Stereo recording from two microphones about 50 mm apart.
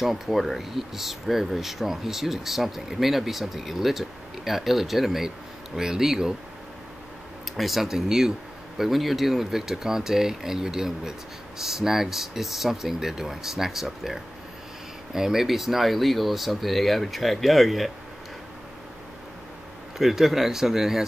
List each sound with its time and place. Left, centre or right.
0.0 s speech: centre
7.5 s speech: centre
20.0 s speech: centre